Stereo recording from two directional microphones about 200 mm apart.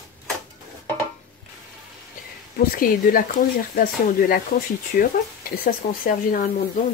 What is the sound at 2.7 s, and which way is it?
Speech, 45° left (ahead or behind).